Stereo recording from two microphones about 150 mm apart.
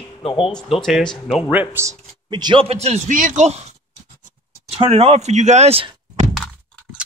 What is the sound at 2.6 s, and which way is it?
Speech, 45° right (ahead or behind).